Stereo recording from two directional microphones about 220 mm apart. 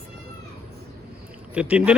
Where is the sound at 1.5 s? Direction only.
5° right (ahead or behind).